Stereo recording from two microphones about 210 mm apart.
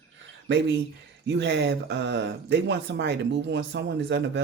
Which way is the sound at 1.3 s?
55° right (ahead or behind).